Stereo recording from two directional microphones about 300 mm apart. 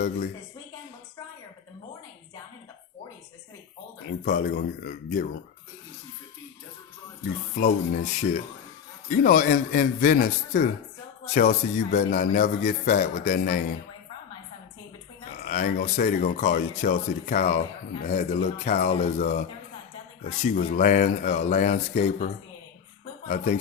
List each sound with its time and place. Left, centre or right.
4.3 s a man's voice: left
7.5 s a man's voice: left
15.4 s a man's voice: left
23.3 s a man's voice: left